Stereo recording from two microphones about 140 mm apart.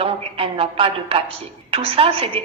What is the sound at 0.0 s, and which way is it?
A woman's voice, 40° right (ahead or behind).